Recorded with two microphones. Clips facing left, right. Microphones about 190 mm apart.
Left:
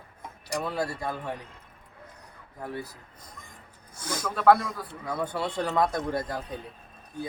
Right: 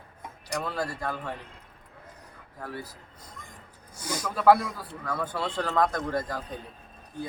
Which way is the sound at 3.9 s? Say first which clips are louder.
Even; 10° right (ahead or behind).